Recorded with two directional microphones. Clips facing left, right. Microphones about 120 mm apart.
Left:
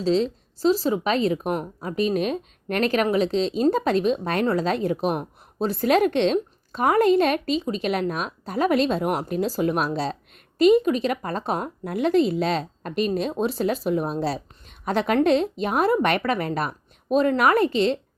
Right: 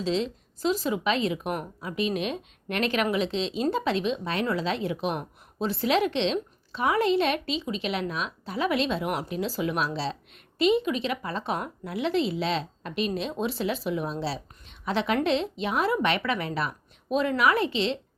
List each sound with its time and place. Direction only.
0.0 s speech: 40° left (ahead or behind)